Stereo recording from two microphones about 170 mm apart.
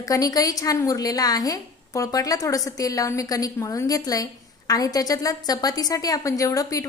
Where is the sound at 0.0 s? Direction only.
20° left (ahead or behind).